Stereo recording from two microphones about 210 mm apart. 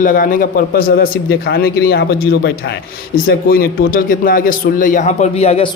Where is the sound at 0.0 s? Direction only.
40° left (ahead or behind).